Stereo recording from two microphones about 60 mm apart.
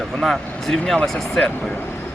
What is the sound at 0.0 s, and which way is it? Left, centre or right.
Speech, centre.